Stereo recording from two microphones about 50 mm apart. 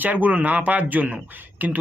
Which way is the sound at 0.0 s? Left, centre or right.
Right.